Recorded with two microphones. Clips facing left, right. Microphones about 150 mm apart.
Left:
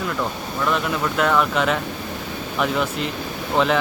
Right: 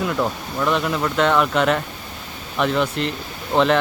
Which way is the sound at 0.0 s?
10° right (ahead or behind).